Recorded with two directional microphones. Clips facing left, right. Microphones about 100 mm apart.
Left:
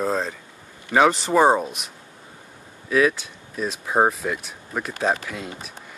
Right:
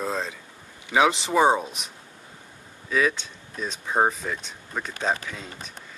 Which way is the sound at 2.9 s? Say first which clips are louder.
Left 4 dB; 5° left (ahead or behind).